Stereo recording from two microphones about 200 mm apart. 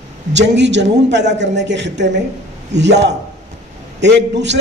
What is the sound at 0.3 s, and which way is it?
A man's voice, 60° right (ahead or behind).